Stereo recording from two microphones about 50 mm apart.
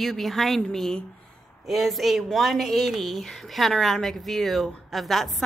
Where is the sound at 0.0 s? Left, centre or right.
Centre.